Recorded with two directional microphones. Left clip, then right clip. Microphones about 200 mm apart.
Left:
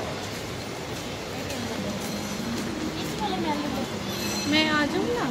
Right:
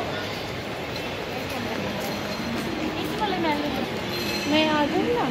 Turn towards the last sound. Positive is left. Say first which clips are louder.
# right 1 dB
turn(degrees=20)  # may be behind; listen again after turning